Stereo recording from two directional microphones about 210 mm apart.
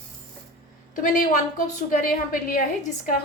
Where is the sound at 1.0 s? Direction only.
40° left (ahead or behind).